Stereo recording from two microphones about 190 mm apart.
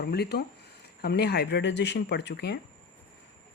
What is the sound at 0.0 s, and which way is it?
Speech, 60° left (ahead or behind).